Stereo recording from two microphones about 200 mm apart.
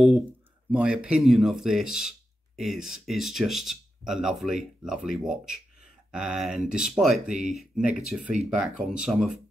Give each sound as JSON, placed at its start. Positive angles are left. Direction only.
{"t": 0.7, "sound": "speech", "side_deg": -5}
{"t": 7.9, "sound": "speech", "side_deg": -40}
{"t": 8.9, "sound": "speech", "side_deg": -5}